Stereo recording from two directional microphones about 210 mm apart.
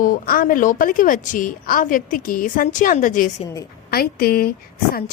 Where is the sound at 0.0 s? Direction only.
40° left (ahead or behind).